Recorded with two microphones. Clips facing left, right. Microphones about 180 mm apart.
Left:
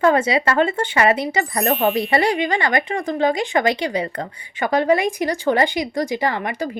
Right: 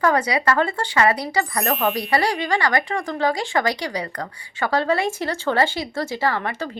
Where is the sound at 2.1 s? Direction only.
20° left (ahead or behind).